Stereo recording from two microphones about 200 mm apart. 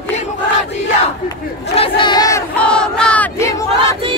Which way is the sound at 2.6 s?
5° left (ahead or behind).